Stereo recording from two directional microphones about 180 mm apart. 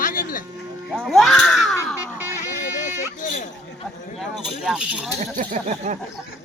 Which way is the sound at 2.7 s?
45° left (ahead or behind).